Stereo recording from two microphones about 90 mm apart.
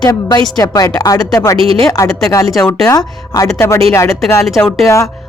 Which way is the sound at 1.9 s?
40° left (ahead or behind).